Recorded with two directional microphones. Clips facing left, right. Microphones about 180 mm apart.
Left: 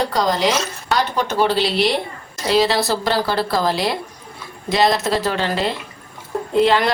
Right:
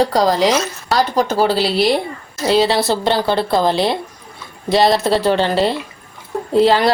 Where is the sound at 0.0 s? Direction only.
35° right (ahead or behind).